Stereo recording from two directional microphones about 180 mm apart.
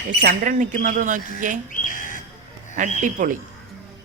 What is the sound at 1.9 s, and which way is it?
Bird, 50° left (ahead or behind).